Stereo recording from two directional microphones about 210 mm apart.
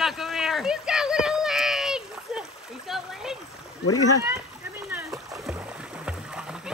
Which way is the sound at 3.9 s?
90° left.